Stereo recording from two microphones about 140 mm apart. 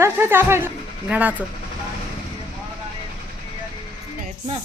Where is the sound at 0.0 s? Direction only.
15° right (ahead or behind).